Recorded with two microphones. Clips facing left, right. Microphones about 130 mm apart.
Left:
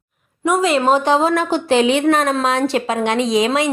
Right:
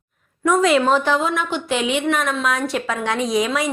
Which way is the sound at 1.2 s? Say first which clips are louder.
Left 6 dB; 35° left (ahead or behind).